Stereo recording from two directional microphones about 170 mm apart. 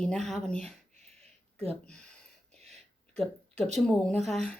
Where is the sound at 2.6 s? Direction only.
40° right (ahead or behind).